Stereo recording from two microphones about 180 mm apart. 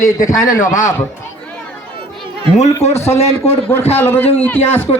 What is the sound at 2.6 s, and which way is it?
Speech, 35° left (ahead or behind).